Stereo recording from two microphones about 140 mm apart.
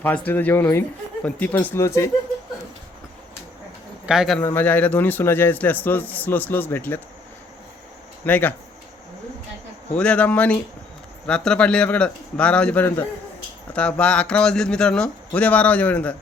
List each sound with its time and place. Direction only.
0.3 s speech: 15° left (ahead or behind)
4.0 s speech: 5° right (ahead or behind)
4.4 s speech: 15° left (ahead or behind)
8.2 s speech: 15° left (ahead or behind)
10.0 s speech: 10° left (ahead or behind)